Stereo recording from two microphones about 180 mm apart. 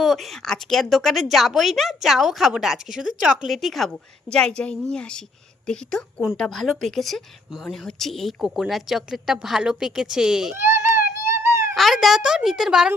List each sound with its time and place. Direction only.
0.0 s speech: centre (ahead or behind)
10.6 s baby cry: 10° right (ahead or behind)
11.7 s speech: centre (ahead or behind)